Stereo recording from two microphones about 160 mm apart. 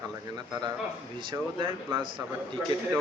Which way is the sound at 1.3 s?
30° right (ahead or behind).